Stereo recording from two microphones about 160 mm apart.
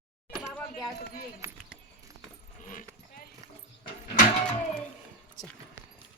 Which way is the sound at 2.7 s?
55° left (ahead or behind).